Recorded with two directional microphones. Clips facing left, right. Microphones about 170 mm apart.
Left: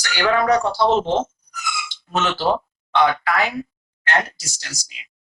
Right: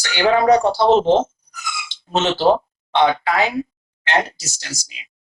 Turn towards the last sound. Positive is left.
turn(degrees=-25)  # may be behind; listen again after turning